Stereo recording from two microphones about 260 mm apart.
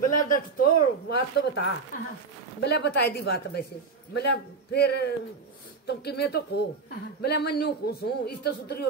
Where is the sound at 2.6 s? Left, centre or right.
Left.